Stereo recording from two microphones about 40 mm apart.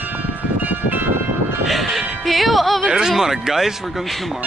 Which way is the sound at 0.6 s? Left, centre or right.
Right.